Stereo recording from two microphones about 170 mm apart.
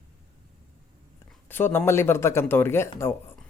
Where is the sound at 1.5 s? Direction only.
10° left (ahead or behind).